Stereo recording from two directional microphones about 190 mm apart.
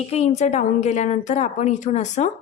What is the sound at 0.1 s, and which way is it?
A woman's voice, 35° left (ahead or behind).